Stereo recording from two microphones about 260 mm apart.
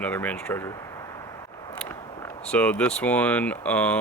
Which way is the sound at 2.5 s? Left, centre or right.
Centre.